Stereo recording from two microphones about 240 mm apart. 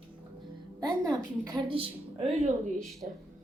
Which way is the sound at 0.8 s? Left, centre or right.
Centre.